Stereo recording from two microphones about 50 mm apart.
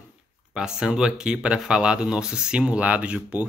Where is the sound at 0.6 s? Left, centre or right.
Centre.